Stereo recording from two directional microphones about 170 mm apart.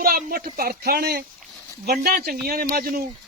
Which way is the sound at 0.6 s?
65° right (ahead or behind).